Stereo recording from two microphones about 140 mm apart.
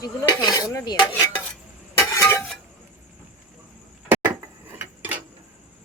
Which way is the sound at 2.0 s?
20° left (ahead or behind).